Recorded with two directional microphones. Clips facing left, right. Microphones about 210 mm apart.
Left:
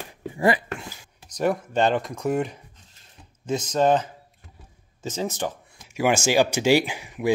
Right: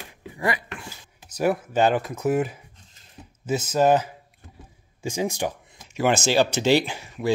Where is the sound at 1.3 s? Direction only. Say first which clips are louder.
Right 1 dB; 5° right (ahead or behind).